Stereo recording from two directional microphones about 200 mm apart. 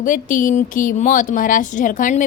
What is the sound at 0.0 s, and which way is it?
A woman's voice, 40° left (ahead or behind).